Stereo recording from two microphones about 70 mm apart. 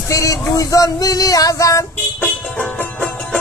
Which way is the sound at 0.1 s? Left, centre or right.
Left.